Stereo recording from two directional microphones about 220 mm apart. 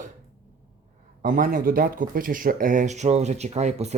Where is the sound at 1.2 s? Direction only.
40° right (ahead or behind).